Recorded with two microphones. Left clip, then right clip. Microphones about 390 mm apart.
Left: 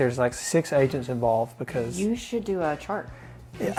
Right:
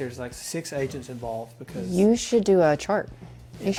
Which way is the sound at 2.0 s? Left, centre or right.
Right.